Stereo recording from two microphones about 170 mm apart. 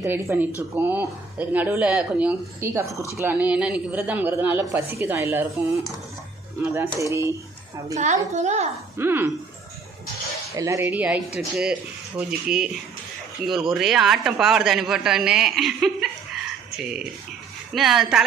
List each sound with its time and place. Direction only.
0.0 s speech: 15° right (ahead or behind)
6.6 s speech: 15° right (ahead or behind)
7.9 s a child's voice: 45° right (ahead or behind)
8.9 s speech: 15° right (ahead or behind)
10.5 s a man's voice: 20° right (ahead or behind); by 16.1 s centre (ahead or behind)
17.7 s a man's voice: centre (ahead or behind)